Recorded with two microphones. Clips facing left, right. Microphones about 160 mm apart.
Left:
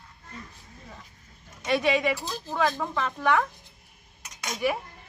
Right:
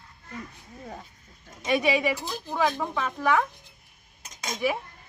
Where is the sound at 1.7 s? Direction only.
10° right (ahead or behind).